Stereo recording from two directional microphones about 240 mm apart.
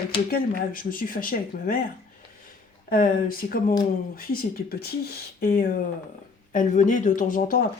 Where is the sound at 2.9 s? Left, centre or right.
Left.